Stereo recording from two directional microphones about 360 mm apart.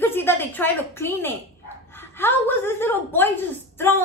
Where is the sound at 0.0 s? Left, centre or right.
Centre.